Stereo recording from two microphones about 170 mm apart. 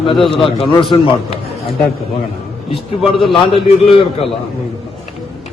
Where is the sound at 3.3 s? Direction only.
35° left (ahead or behind).